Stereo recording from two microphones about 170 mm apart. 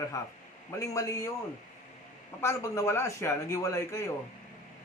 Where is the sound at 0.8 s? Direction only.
20° left (ahead or behind).